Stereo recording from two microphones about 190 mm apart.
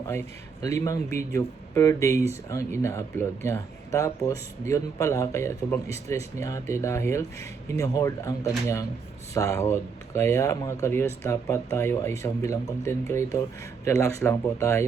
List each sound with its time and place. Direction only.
0.1 s speech: 15° left (ahead or behind)